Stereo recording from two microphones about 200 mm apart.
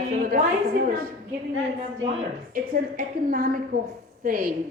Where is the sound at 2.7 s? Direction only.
45° right (ahead or behind).